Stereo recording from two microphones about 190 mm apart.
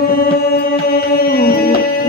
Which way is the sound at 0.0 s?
50° left (ahead or behind).